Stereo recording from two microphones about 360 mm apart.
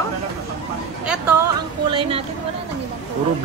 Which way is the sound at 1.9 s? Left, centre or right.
Centre.